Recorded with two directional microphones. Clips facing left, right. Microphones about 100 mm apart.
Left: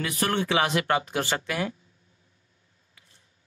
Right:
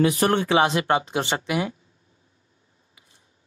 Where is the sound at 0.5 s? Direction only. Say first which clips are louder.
Right 4 dB; 25° right (ahead or behind).